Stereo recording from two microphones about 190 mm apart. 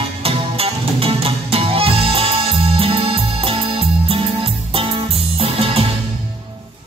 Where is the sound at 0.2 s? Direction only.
30° right (ahead or behind).